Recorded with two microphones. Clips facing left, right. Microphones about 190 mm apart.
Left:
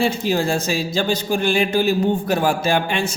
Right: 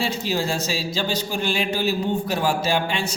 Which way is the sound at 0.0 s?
50° left (ahead or behind).